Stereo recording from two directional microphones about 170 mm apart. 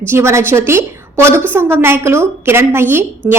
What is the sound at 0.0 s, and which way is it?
A woman's voice, 15° right (ahead or behind).